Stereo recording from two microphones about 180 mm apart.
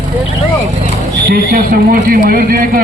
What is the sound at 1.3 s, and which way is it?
Speech, 55° right (ahead or behind).